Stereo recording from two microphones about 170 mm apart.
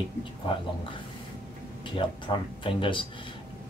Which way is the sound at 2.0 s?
30° left (ahead or behind).